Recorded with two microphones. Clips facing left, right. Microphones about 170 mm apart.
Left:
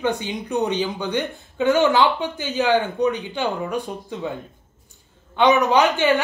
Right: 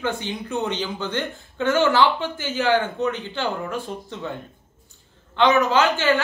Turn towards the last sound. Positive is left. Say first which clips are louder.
# left 2 dB
turn(degrees=15)  # may be behind; listen again after turning